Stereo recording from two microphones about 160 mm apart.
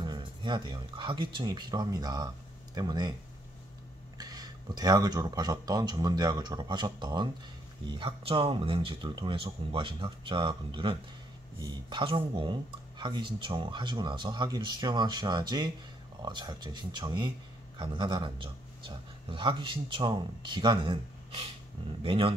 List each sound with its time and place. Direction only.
0.0 s speech: 30° right (ahead or behind)
4.2 s speech: 25° right (ahead or behind)